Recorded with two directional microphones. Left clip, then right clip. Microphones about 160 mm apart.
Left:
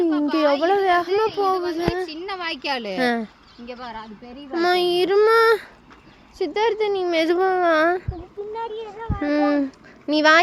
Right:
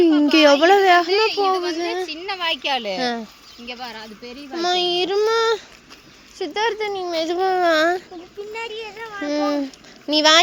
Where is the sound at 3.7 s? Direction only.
90° left.